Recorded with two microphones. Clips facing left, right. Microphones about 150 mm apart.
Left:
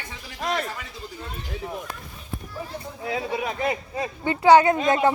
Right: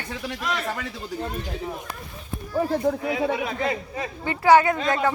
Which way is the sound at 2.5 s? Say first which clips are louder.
Right 15 dB; 65° right (ahead or behind).